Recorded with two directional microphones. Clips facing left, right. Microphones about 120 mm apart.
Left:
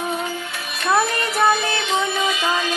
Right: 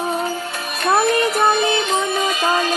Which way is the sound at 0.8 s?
45° right (ahead or behind).